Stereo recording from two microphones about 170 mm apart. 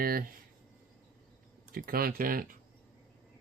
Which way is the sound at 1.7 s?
60° right (ahead or behind).